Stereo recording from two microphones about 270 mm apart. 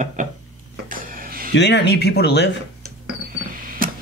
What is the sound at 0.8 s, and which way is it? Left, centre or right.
Printer, right.